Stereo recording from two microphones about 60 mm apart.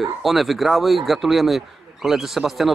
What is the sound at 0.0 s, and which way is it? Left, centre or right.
Speech, centre.